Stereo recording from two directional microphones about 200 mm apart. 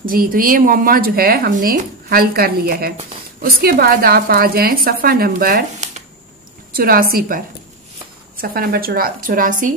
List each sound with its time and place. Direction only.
0.0 s speech: 45° right (ahead or behind)